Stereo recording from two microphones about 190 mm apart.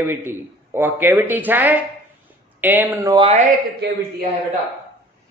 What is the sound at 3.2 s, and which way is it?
Speech, 35° right (ahead or behind).